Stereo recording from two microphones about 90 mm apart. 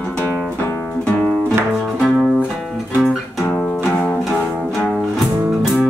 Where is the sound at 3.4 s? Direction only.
15° left (ahead or behind).